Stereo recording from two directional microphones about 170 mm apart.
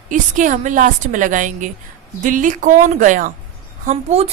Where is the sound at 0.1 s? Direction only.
50° right (ahead or behind).